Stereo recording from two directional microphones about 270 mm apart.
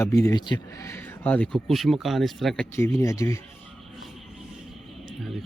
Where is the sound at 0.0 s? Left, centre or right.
Centre.